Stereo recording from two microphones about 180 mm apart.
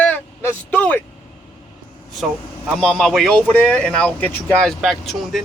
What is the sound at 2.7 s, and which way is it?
Speech, centre (ahead or behind).